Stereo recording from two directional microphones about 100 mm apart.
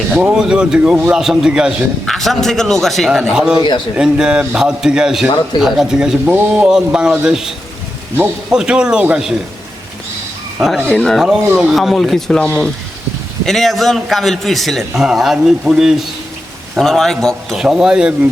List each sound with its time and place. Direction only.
0.2 s a man's voice: 10° right (ahead or behind)
2.0 s a man's voice: centre (ahead or behind)
8.1 s speech: 20° right (ahead or behind)
8.5 s a man's voice: 10° right (ahead or behind)
10.6 s a man's voice: centre (ahead or behind)